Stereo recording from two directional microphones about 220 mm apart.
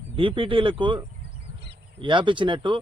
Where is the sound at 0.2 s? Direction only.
25° right (ahead or behind).